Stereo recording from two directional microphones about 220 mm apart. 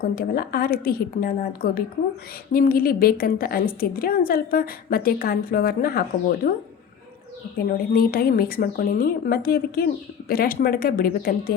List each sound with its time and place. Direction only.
0.0 s a woman's voice: 45° left (ahead or behind)
7.6 s a woman's voice: 40° left (ahead or behind)